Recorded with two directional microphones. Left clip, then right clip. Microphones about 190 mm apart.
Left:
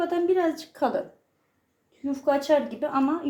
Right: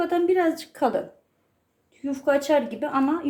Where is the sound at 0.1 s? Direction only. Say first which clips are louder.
Right 2 dB; 25° right (ahead or behind).